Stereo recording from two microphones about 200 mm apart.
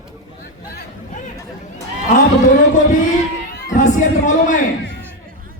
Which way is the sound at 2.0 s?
40° left (ahead or behind).